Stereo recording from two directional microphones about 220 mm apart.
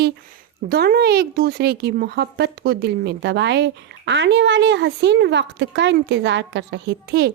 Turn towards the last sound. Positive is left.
turn(degrees=-50)  # may be behind; listen again after turning